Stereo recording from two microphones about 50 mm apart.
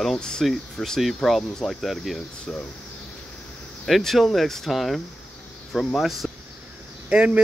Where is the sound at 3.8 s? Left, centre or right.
Centre.